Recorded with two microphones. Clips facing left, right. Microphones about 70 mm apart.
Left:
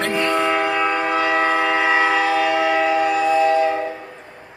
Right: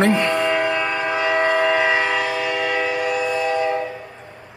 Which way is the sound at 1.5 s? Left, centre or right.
Left.